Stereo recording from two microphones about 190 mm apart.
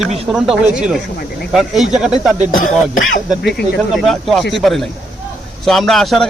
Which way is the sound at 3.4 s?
60° left (ahead or behind).